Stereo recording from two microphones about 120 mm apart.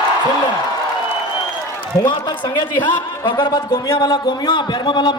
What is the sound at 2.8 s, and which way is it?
A man's voice, 40° left (ahead or behind).